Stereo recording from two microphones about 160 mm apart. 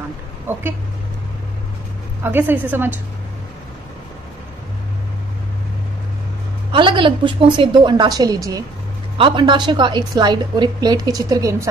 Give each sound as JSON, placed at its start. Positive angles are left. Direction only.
{"t": 0.5, "sound": "a sound", "side_deg": -15}
{"t": 2.2, "sound": "a woman's voice", "side_deg": -10}
{"t": 6.7, "sound": "a woman's voice", "side_deg": -30}